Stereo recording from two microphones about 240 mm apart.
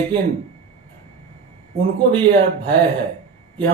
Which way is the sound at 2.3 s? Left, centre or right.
Centre.